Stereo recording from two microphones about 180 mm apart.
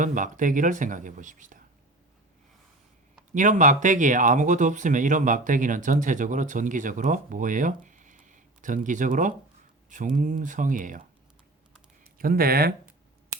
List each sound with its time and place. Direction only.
0.0 s speech: 45° right (ahead or behind)
3.3 s speech: 45° right (ahead or behind)
12.1 s speech: 55° right (ahead or behind)